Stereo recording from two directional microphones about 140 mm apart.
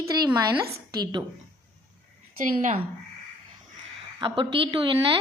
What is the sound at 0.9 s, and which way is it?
Speech, 30° right (ahead or behind).